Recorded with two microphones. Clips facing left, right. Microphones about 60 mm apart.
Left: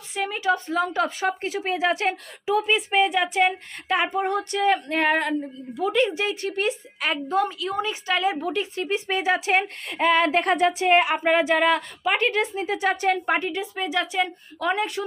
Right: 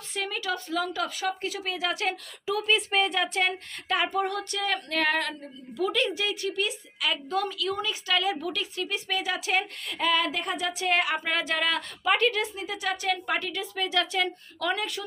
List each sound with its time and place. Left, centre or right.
0.1 s speech: centre